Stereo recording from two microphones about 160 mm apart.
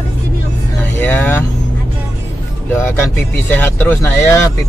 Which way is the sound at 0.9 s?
10° left (ahead or behind).